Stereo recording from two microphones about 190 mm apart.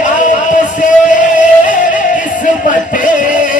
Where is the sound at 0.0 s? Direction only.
40° left (ahead or behind).